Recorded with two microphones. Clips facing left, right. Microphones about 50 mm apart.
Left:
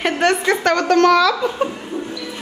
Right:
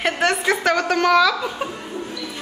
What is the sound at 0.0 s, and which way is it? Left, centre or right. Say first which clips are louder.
A woman's voice: left 3 dB; centre.